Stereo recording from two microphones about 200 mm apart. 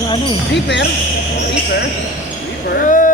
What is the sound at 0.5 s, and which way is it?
Speech, 60° left (ahead or behind).